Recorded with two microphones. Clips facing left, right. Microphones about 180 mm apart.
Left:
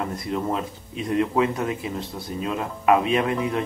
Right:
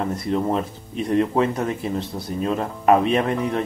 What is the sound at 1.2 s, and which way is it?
Speech, 35° right (ahead or behind).